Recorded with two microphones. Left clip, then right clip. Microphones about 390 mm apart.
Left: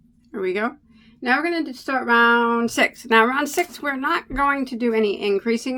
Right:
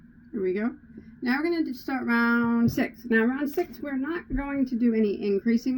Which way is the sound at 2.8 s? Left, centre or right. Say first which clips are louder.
Left 9 dB; left.